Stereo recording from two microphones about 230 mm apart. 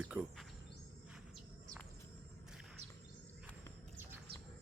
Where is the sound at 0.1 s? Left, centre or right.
Centre.